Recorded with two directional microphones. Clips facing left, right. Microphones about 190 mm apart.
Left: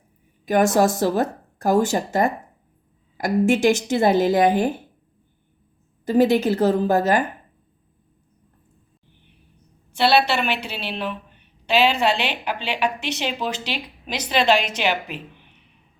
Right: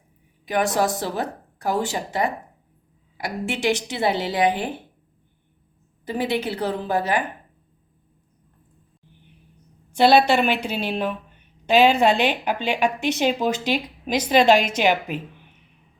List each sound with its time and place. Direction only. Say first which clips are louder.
0.4 s speech: left 4 dB; 45° left (ahead or behind)
6.1 s speech: left 7 dB; 45° left (ahead or behind)
10.0 s a woman's voice: right 3 dB; 45° right (ahead or behind)